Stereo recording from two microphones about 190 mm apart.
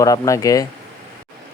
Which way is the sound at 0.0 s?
20° left (ahead or behind).